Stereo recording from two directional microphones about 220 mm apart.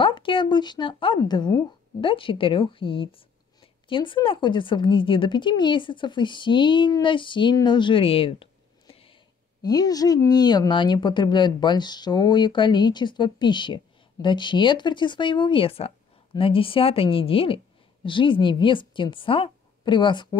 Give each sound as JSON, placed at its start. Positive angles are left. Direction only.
{"t": 0.0, "sound": "speech", "side_deg": 20}